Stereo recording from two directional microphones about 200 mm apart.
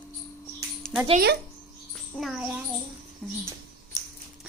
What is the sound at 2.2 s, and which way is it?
A woman's voice, 5° right (ahead or behind).